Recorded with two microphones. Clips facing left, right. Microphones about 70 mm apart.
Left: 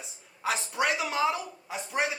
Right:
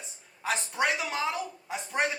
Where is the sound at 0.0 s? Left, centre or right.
Centre.